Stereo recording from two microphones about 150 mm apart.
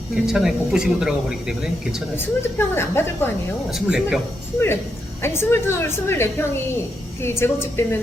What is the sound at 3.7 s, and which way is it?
Speech, 5° right (ahead or behind).